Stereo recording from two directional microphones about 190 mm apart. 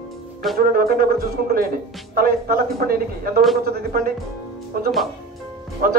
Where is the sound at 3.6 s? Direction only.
55° right (ahead or behind).